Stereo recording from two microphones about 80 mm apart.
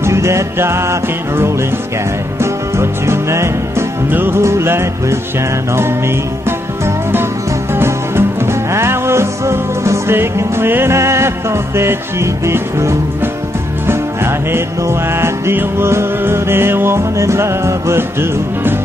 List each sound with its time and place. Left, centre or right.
0.0 s music: right